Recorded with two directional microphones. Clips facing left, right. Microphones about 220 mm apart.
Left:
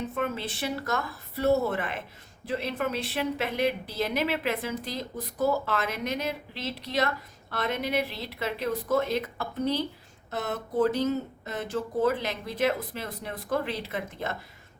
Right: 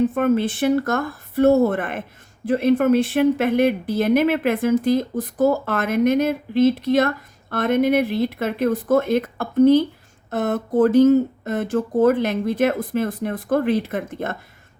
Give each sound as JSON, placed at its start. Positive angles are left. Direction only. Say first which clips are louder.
{"t": 0.0, "sound": "speech", "louder": "right 13 dB", "side_deg": -50}